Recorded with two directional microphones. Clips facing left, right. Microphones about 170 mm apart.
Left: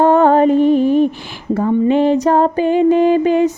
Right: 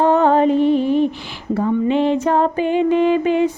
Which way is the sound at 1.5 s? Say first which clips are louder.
Left 3 dB; 45° left (ahead or behind).